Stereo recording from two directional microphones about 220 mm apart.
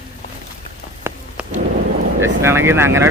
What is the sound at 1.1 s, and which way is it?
Rain on surface, 10° right (ahead or behind).